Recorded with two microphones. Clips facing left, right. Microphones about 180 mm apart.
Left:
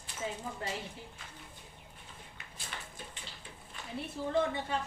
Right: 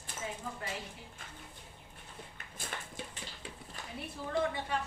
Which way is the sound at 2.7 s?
45° right (ahead or behind).